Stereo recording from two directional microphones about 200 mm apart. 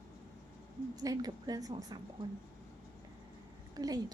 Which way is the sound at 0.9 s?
20° right (ahead or behind).